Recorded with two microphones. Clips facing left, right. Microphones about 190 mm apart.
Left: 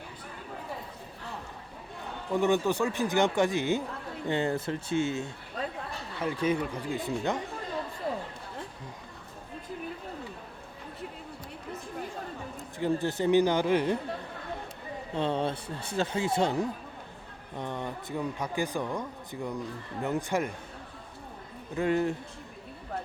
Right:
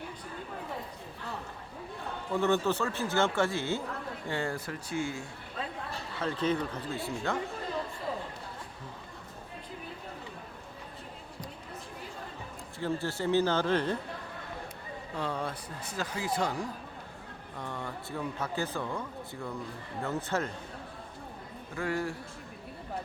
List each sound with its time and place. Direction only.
2.3 s speech: 15° left (ahead or behind)
6.2 s speech: 10° left (ahead or behind)
12.8 s speech: 20° left (ahead or behind)
15.1 s speech: 25° left (ahead or behind)
21.8 s speech: 20° left (ahead or behind)